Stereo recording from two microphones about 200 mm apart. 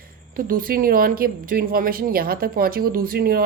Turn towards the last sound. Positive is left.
turn(degrees=-50)  # may be behind; listen again after turning